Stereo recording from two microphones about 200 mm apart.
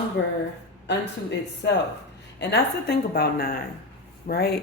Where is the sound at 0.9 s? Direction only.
60° left (ahead or behind).